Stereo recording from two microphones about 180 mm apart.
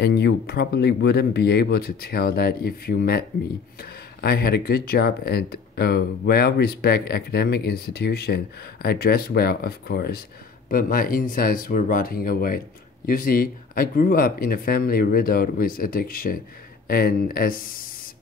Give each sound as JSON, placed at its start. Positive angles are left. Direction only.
{"t": 0.0, "sound": "speech", "side_deg": 65}